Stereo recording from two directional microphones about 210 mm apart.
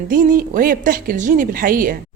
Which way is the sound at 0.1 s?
40° right (ahead or behind).